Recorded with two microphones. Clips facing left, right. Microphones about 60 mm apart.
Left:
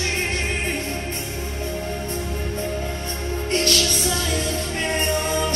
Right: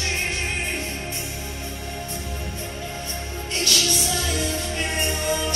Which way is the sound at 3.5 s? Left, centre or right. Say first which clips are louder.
Left 4 dB; left.